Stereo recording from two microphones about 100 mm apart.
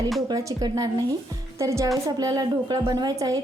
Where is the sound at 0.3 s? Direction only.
35° right (ahead or behind).